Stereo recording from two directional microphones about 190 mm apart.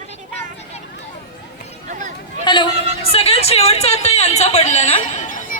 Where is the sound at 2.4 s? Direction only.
25° left (ahead or behind).